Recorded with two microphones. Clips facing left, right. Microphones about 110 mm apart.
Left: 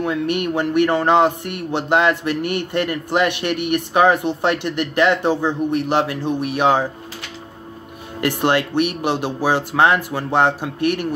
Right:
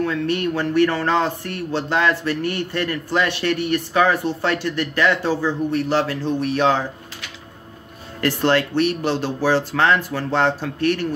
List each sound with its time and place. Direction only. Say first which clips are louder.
0.0 s speech: left 1 dB; 15° left (ahead or behind)
8.2 s speech: even; 15° left (ahead or behind)